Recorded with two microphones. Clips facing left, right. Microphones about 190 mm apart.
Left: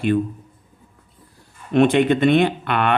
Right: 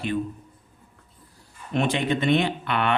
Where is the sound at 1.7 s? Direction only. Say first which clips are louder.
Left 9 dB; 60° left (ahead or behind).